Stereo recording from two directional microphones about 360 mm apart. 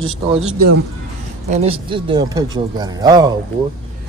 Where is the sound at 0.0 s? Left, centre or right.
Centre.